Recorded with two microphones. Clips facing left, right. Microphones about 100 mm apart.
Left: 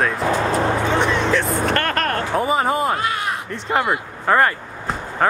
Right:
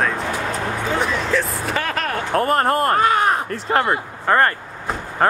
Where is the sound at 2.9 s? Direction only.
45° right (ahead or behind).